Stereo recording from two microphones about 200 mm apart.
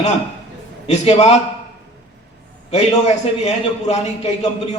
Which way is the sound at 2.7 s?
35° left (ahead or behind).